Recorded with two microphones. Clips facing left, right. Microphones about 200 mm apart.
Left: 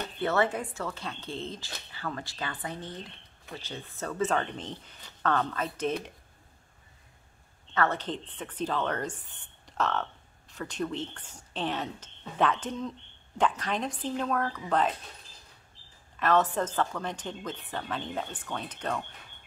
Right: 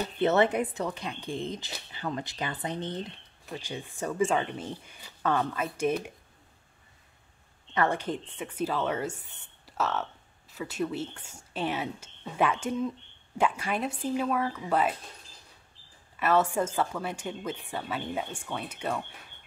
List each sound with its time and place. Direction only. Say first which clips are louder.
0.2 s speech: right 4 dB; 20° right (ahead or behind)
7.7 s speech: right 1 dB; 15° right (ahead or behind)
16.2 s speech: right 1 dB; 10° right (ahead or behind)